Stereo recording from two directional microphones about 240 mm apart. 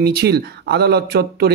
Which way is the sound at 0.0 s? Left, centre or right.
Right.